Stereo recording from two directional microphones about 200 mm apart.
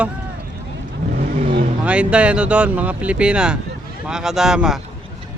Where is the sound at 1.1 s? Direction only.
45° right (ahead or behind).